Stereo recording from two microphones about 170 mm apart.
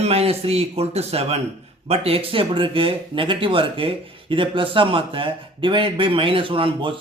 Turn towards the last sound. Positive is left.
turn(degrees=-30)  # may be behind; listen again after turning